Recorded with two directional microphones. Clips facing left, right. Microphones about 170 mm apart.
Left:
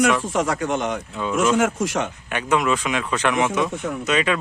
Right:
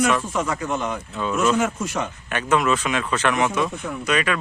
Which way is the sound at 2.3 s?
15° left (ahead or behind).